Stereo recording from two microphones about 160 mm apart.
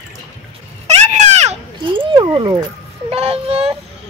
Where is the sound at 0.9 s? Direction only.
45° right (ahead or behind).